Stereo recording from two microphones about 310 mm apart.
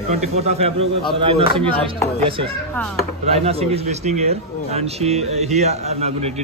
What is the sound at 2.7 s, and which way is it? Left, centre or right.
Speech, centre.